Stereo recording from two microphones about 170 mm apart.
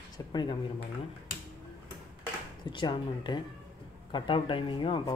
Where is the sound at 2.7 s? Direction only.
25° left (ahead or behind).